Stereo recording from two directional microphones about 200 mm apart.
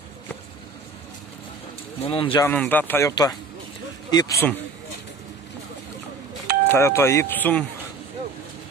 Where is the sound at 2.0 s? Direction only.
25° left (ahead or behind).